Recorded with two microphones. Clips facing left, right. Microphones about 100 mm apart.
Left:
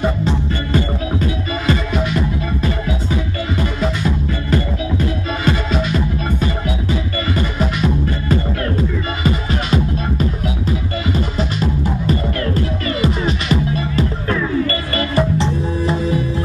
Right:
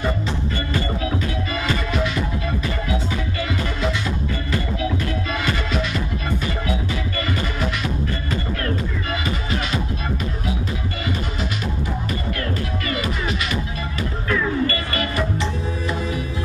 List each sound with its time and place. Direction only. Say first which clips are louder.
14.7 s music: left 4 dB; 35° left (ahead or behind)